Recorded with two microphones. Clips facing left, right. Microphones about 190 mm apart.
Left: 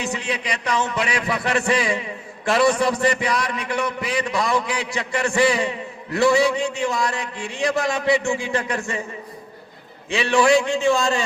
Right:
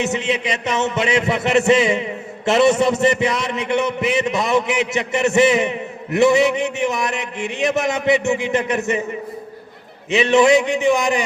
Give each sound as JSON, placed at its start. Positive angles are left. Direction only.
{"t": 0.0, "sound": "a man's voice", "side_deg": -25}
{"t": 10.1, "sound": "a man's voice", "side_deg": -20}